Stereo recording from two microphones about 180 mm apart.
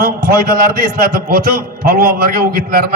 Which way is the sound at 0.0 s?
55° right (ahead or behind).